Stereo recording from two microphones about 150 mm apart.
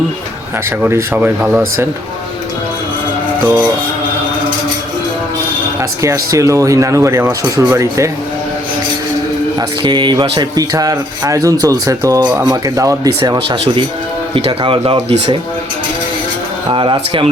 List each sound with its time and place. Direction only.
0.8 s speech: 15° right (ahead or behind)
3.4 s speech: 10° right (ahead or behind)
6.0 s speech: 20° right (ahead or behind)
9.6 s speech: 30° right (ahead or behind)
16.6 s speech: 30° right (ahead or behind)